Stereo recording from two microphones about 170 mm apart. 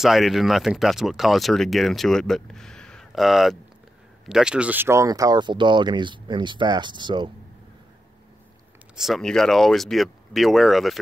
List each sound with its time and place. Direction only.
0.0 s speech: centre (ahead or behind); by 7.2 s 25° right (ahead or behind)
8.9 s speech: centre (ahead or behind)